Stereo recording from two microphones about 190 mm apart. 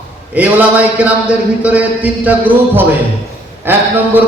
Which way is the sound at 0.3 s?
10° right (ahead or behind).